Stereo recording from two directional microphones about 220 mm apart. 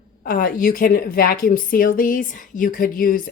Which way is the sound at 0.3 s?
40° left (ahead or behind).